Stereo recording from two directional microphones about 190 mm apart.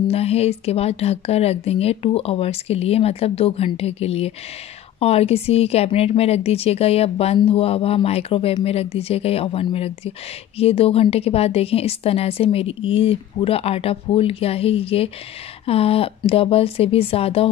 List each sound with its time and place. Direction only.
0.1 s speech: 35° left (ahead or behind)